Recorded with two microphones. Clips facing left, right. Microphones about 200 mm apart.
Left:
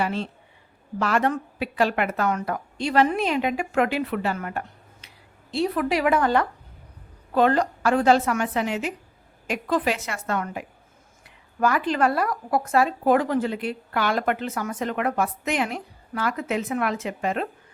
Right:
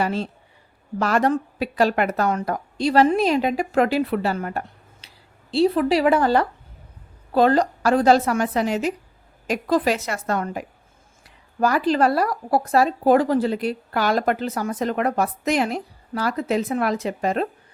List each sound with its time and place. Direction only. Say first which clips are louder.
0.0 s speech: right 3 dB; 40° right (ahead or behind)